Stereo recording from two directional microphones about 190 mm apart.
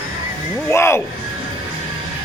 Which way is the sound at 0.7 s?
15° left (ahead or behind).